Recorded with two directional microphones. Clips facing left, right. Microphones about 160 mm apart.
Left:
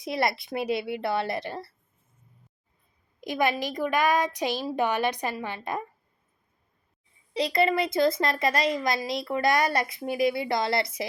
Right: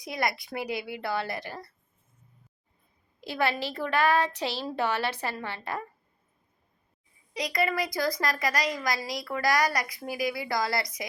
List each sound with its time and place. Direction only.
0.0 s a woman's voice: 25° left (ahead or behind)
3.2 s a woman's voice: 15° left (ahead or behind)
7.3 s a woman's voice: 30° left (ahead or behind)